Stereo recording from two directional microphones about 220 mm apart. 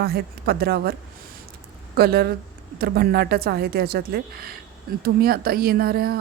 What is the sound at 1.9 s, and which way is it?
Speech, 45° right (ahead or behind).